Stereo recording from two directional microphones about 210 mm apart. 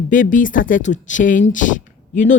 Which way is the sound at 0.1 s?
40° left (ahead or behind).